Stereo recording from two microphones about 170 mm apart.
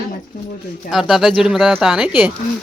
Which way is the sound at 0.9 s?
Centre (ahead or behind).